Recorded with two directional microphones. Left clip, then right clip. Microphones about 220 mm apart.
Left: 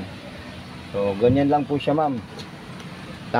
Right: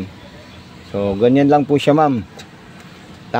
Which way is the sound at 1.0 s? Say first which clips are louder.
Right 5 dB; 50° right (ahead or behind).